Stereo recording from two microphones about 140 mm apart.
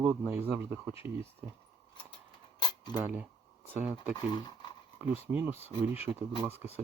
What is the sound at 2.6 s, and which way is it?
Cutlery, 30° left (ahead or behind).